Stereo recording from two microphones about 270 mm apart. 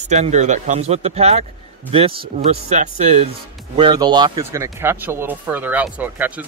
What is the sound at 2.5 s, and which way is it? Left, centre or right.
A man's voice, right.